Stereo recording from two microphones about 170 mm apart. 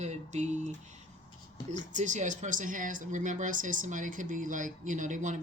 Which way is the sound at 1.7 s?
45° right (ahead or behind).